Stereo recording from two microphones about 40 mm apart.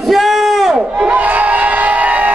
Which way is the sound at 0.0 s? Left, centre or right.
Centre.